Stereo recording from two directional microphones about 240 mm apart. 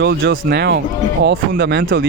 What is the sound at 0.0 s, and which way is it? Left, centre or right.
Speech, right.